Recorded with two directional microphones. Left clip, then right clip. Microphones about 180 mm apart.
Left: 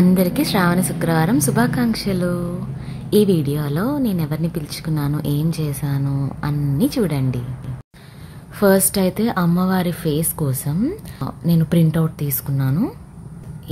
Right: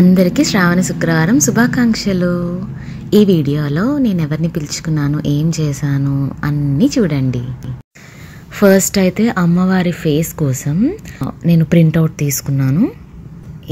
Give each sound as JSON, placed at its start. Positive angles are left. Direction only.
{"t": 0.0, "sound": "a woman's voice", "side_deg": -15}
{"t": 8.5, "sound": "a woman's voice", "side_deg": -20}